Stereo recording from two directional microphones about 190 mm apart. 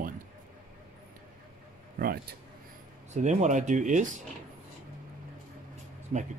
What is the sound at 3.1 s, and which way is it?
Speech, 40° right (ahead or behind).